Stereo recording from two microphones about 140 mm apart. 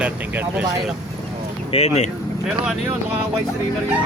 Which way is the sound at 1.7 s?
50° left (ahead or behind).